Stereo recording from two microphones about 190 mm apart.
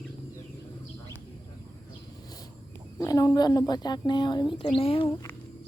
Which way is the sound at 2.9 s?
20° left (ahead or behind).